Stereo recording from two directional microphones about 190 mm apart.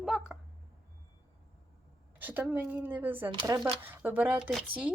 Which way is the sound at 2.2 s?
10° right (ahead or behind).